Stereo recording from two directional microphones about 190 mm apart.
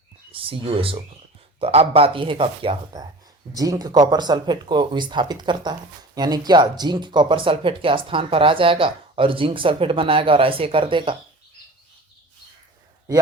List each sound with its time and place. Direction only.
0.3 s speech: 30° right (ahead or behind)